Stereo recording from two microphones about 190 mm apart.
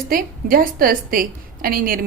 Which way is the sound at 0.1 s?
50° right (ahead or behind).